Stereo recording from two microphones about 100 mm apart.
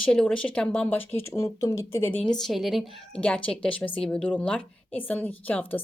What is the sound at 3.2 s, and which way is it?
A woman's voice, 15° left (ahead or behind).